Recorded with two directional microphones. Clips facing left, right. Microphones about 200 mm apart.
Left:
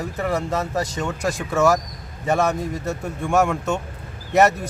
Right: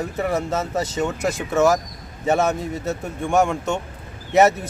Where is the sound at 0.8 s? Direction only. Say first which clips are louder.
Right 2 dB; 20° right (ahead or behind).